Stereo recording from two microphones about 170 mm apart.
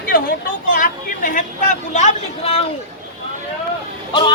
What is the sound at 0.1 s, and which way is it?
Speech, 55° left (ahead or behind).